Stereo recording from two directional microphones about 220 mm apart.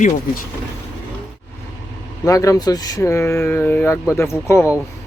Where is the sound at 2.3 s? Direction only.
15° left (ahead or behind).